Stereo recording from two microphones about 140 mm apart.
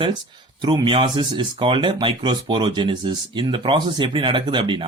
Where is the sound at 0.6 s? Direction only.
35° right (ahead or behind).